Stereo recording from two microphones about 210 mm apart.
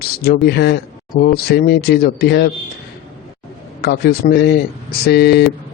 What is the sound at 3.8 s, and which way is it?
A man's voice, 50° left (ahead or behind).